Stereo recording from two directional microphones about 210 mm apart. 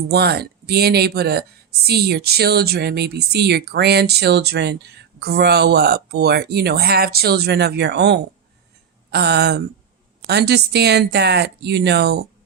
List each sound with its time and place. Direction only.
0.1 s speech: 50° right (ahead or behind)